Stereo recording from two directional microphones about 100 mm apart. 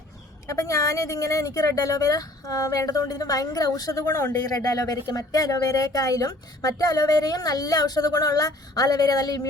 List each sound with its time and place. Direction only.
0.4 s speech: 30° left (ahead or behind)